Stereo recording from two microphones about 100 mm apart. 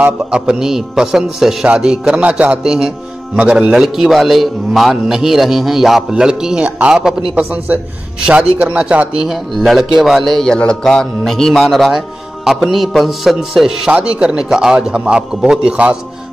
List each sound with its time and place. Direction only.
0.0 s a man's voice: 10° right (ahead or behind)